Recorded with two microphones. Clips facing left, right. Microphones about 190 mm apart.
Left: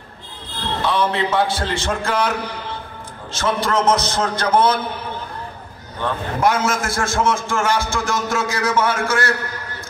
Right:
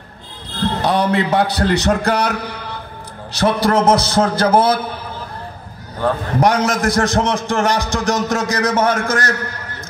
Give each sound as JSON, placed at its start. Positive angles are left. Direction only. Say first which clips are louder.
{"t": 0.6, "sound": "a man's voice", "louder": "right 3 dB", "side_deg": -40}
{"t": 3.3, "sound": "a man's voice", "louder": "right 5 dB", "side_deg": -35}
{"t": 5.9, "sound": "a man's voice", "louder": "right 5 dB", "side_deg": -40}